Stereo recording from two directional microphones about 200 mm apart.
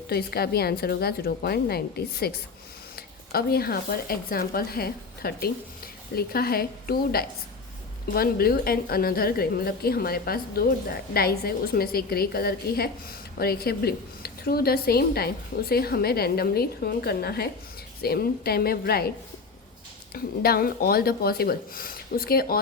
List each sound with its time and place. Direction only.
0.1 s a woman's voice: 50° left (ahead or behind)
20.1 s a woman's voice: 50° left (ahead or behind)